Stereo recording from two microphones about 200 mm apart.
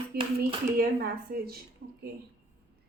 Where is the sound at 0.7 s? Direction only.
50° right (ahead or behind).